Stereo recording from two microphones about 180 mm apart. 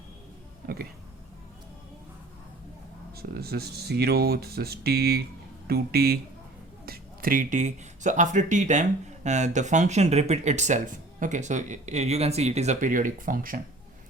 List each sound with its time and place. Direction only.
3.2 s speech: 60° right (ahead or behind)